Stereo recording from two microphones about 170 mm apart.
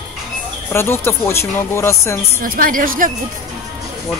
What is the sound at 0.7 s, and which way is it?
A man's voice, 15° left (ahead or behind).